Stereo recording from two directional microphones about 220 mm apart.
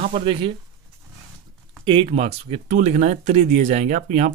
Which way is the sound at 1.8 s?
25° right (ahead or behind).